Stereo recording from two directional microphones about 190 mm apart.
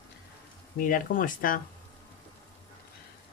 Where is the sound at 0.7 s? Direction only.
45° left (ahead or behind).